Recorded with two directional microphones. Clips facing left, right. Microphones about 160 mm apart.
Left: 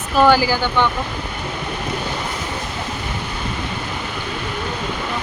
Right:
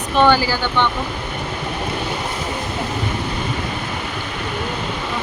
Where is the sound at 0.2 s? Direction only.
10° left (ahead or behind).